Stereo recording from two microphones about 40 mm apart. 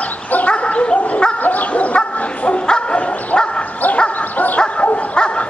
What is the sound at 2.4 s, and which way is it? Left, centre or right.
Bow-wow, left.